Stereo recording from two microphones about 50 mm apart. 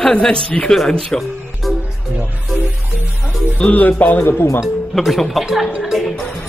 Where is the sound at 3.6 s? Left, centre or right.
Left.